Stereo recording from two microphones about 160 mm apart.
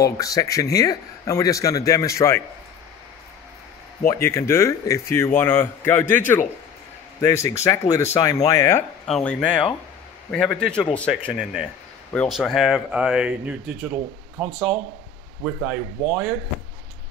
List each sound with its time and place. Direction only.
0.0 s a man's voice: 20° left (ahead or behind)
4.1 s a man's voice: 15° left (ahead or behind)
9.0 s a man's voice: 5° left (ahead or behind)